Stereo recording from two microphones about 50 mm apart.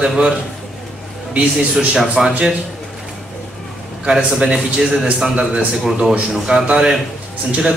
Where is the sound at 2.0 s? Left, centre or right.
Centre.